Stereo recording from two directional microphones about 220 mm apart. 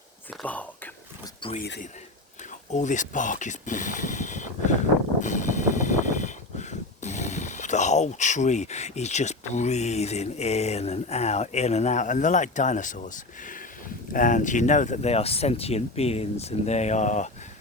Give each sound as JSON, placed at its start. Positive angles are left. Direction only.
{"t": 0.3, "sound": "whispering", "side_deg": 5}
{"t": 1.5, "sound": "speech", "side_deg": 45}
{"t": 5.2, "sound": "a sound", "side_deg": 35}
{"t": 14.1, "sound": "speech", "side_deg": 35}